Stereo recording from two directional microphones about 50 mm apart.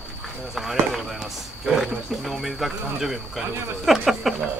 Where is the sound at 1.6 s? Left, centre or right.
Centre.